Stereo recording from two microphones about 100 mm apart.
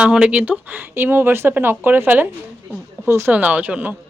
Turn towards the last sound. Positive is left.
turn(degrees=-15)  # may be behind; listen again after turning